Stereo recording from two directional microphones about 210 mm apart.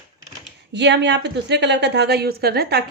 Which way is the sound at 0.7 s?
55° right (ahead or behind).